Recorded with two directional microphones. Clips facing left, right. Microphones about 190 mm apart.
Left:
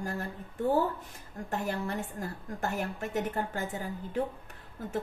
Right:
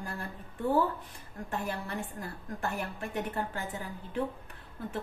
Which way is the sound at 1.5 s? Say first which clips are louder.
Left 3 dB; 45° left (ahead or behind).